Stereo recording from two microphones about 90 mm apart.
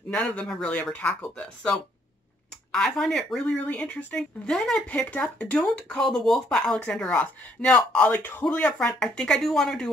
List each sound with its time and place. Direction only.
0.1 s speech: 10° left (ahead or behind)
3.5 s speech: 15° left (ahead or behind)
5.6 s speech: 5° left (ahead or behind)